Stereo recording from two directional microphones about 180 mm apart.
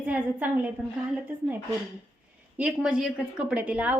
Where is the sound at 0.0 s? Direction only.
10° right (ahead or behind).